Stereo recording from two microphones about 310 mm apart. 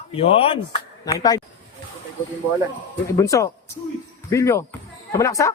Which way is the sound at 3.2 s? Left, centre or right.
Centre.